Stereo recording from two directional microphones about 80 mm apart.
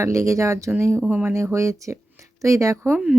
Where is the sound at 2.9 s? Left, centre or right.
Centre.